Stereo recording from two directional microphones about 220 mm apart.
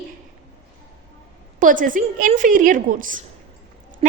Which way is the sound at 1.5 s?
35° right (ahead or behind).